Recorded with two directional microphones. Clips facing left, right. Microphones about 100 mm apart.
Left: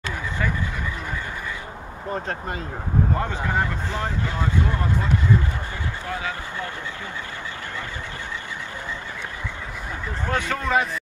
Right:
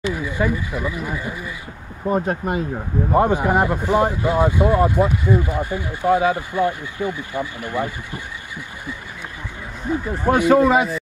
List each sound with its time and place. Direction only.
0.0 s a sound: 15° right (ahead or behind)
0.9 s speech: 10° right (ahead or behind)
10.1 s speech: 15° right (ahead or behind)